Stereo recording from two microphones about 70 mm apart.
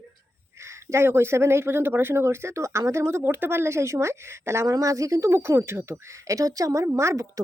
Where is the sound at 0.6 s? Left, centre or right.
Right.